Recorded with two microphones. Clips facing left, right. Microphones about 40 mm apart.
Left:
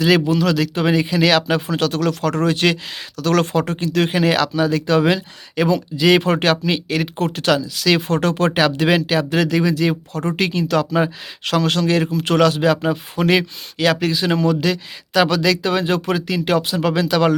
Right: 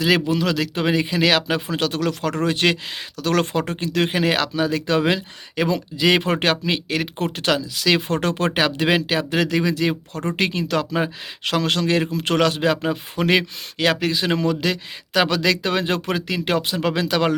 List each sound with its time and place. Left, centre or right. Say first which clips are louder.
0.3 s speech: left 3 dB; right
15.4 s speech: left 2 dB; right